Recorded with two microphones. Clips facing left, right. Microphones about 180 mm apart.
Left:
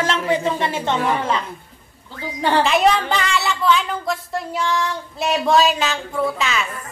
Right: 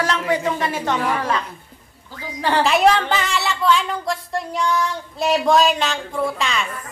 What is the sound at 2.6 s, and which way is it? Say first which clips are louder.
A woman's voice: right 2 dB; centre (ahead or behind).